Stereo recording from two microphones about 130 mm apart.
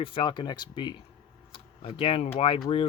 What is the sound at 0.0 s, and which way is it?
Speech, 40° left (ahead or behind).